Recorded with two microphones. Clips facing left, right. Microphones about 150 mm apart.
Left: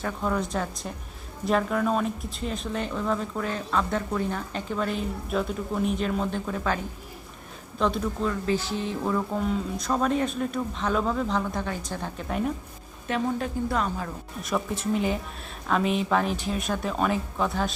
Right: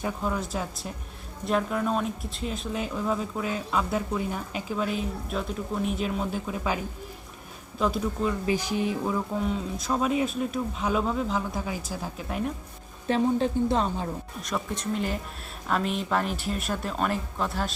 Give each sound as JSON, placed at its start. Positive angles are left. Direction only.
{"t": 0.0, "sound": "speech", "side_deg": -5}
{"t": 7.8, "sound": "speech", "side_deg": -5}
{"t": 13.1, "sound": "a woman's voice", "side_deg": -30}
{"t": 14.4, "sound": "speech", "side_deg": 0}